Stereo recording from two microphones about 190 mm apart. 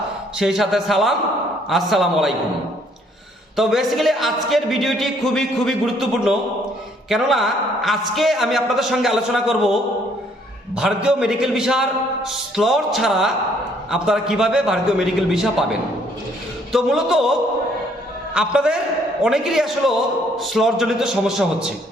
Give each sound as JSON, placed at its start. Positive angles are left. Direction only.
{"t": 0.3, "sound": "speech", "side_deg": 0}
{"t": 3.5, "sound": "speech", "side_deg": 0}
{"t": 10.8, "sound": "speech", "side_deg": -5}
{"t": 18.3, "sound": "speech", "side_deg": -5}